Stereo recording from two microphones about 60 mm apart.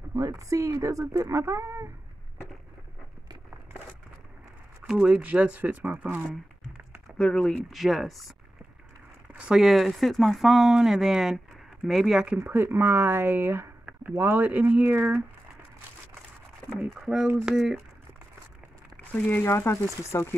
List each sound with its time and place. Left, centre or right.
0.1 s speech: right
4.8 s speech: centre
5.2 s speech: right
7.2 s speech: centre
7.7 s speech: centre
9.6 s speech: centre
12.6 s speech: right
16.9 s speech: centre
18.9 s a sound: left
19.4 s speech: left